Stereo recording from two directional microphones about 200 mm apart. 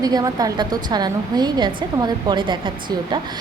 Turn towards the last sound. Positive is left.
turn(degrees=-20)  # may be behind; listen again after turning